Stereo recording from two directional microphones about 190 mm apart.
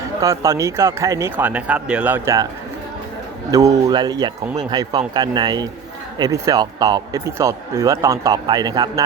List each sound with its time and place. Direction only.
0.2 s speech: 15° right (ahead or behind)
3.5 s speech: 20° right (ahead or behind)